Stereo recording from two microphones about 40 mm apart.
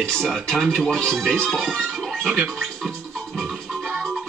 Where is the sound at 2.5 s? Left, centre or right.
Centre.